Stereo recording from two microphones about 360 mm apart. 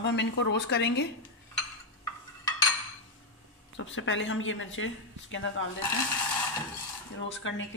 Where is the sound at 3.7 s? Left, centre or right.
Left.